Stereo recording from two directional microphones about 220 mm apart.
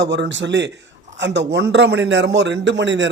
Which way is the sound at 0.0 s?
55° right (ahead or behind).